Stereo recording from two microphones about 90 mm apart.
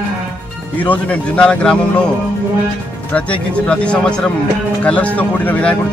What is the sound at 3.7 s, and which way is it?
A man's voice, 10° left (ahead or behind).